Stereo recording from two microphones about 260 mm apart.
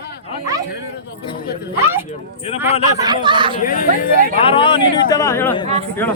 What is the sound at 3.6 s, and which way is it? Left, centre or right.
Speech, left.